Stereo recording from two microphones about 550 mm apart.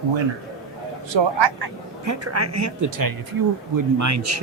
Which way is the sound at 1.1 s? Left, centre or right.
Right.